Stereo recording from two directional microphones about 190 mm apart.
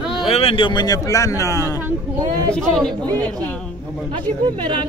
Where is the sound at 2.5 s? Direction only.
5° left (ahead or behind).